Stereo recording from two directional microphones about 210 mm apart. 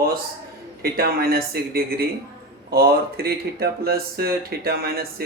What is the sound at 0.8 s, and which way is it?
Speech, 45° right (ahead or behind).